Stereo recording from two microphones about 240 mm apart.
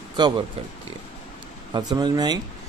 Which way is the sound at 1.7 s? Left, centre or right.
Centre.